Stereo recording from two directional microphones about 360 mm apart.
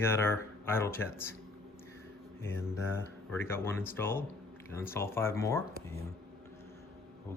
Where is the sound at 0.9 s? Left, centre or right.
Centre.